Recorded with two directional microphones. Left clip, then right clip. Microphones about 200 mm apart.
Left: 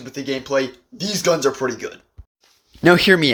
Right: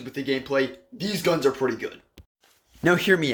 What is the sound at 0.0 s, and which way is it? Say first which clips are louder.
Speech: left 2 dB; 5° left (ahead or behind).